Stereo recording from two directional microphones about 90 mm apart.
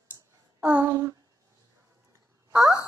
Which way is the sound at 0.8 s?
45° right (ahead or behind).